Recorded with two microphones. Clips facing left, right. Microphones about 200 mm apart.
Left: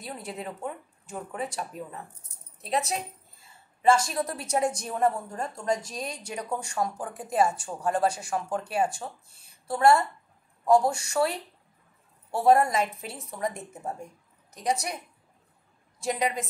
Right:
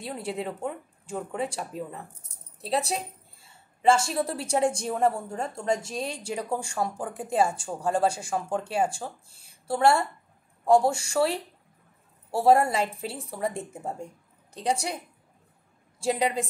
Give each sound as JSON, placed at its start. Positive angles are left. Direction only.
{"t": 0.0, "sound": "a woman's voice", "side_deg": -30}
{"t": 16.0, "sound": "a woman's voice", "side_deg": -30}